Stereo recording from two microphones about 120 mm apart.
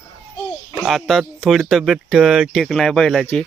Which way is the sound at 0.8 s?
Centre (ahead or behind).